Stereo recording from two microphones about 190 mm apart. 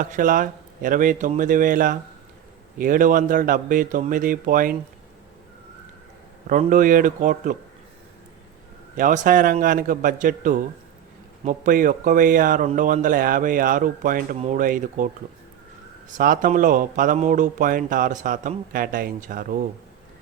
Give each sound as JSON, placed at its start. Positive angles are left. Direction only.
{"t": 0.0, "sound": "speech", "side_deg": -45}
{"t": 6.5, "sound": "speech", "side_deg": -40}
{"t": 9.0, "sound": "speech", "side_deg": -45}
{"t": 16.1, "sound": "speech", "side_deg": -45}